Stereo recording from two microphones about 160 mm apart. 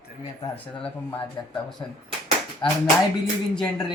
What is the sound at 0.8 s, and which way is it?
Speech, 10° left (ahead or behind).